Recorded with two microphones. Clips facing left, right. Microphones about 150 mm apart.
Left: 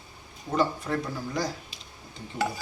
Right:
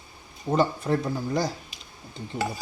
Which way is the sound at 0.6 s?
30° right (ahead or behind).